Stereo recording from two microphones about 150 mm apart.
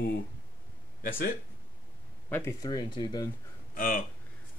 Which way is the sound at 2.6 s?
30° left (ahead or behind).